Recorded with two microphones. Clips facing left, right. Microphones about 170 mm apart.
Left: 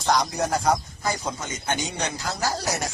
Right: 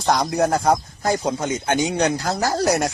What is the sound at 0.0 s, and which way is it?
Speech, 60° right (ahead or behind).